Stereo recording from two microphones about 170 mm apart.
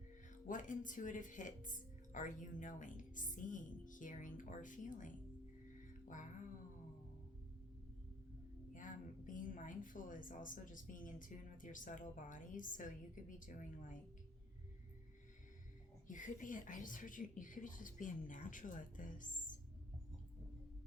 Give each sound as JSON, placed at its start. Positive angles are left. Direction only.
{"t": 0.4, "sound": "a woman's voice", "side_deg": 50}
{"t": 8.7, "sound": "a woman's voice", "side_deg": 50}
{"t": 16.0, "sound": "a woman's voice", "side_deg": 50}